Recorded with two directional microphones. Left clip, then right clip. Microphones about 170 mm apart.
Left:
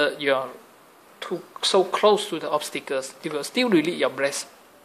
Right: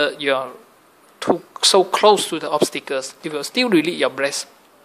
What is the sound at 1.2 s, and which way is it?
Speech, 25° right (ahead or behind).